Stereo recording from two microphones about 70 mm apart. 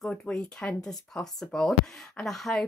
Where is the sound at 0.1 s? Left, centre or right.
Centre.